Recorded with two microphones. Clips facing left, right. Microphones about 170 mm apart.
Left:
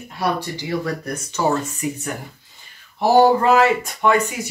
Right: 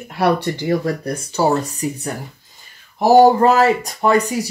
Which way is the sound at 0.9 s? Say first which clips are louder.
Right 4 dB; 35° right (ahead or behind).